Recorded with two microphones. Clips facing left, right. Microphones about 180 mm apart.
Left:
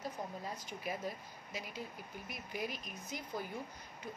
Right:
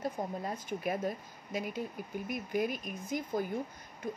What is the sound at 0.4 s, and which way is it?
Speech, 55° right (ahead or behind).